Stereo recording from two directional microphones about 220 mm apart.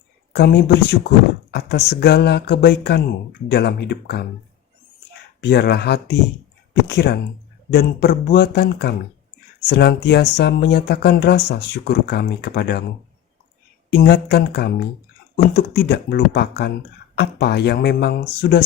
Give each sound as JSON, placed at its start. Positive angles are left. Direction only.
{"t": 0.3, "sound": "speech", "side_deg": 45}
{"t": 5.4, "sound": "speech", "side_deg": 50}
{"t": 13.9, "sound": "speech", "side_deg": 50}